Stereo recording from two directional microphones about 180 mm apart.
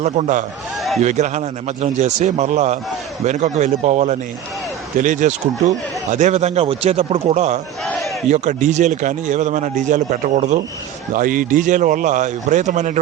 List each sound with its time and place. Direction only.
0.0 s speech: 40° right (ahead or behind)
0.8 s a sound: centre (ahead or behind)
1.0 s a man's voice: 40° right (ahead or behind)
7.9 s battle cry: centre (ahead or behind)
8.3 s a man's voice: 45° right (ahead or behind)